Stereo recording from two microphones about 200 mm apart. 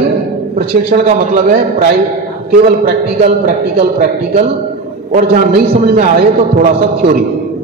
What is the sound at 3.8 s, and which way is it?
Speech, 45° right (ahead or behind).